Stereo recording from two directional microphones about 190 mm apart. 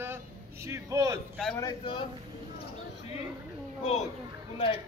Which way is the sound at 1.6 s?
25° left (ahead or behind).